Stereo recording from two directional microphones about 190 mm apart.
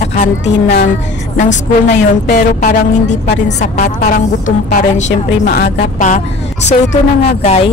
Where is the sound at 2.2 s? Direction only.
55° left (ahead or behind).